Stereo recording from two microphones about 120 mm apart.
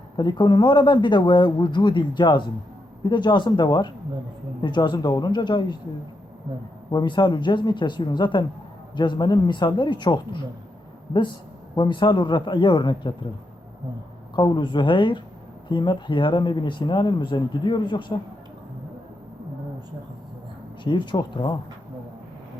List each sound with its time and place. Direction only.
0.2 s speech: 40° left (ahead or behind)
6.9 s speech: 40° left (ahead or behind)
11.8 s speech: 40° left (ahead or behind)
14.3 s speech: 40° left (ahead or behind)
20.8 s speech: 40° left (ahead or behind)